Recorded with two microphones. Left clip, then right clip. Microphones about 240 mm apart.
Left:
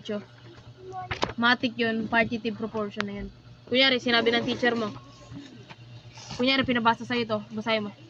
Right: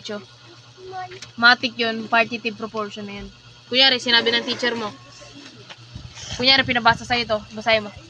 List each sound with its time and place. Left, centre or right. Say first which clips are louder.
0.1 s speech: left 1 dB; right
1.4 s speech: right 9 dB; right
6.2 s speech: right 8 dB; centre